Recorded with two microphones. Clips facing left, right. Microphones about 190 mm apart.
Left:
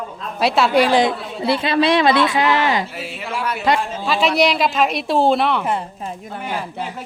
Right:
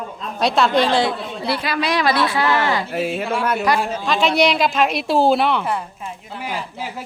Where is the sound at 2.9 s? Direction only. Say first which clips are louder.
Right 7 dB; 45° right (ahead or behind).